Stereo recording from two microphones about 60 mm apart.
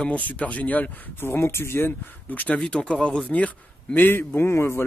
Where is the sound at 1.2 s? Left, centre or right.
Left.